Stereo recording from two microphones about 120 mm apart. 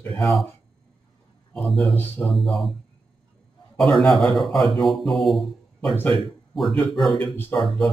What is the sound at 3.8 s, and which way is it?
A man's voice, centre (ahead or behind).